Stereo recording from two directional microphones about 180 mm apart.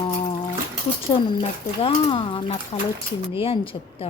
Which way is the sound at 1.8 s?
30° left (ahead or behind).